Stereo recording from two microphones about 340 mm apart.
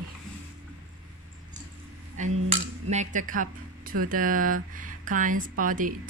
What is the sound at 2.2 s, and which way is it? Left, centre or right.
Speech, right.